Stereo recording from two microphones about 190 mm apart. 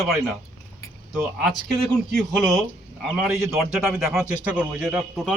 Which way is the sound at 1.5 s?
Centre (ahead or behind).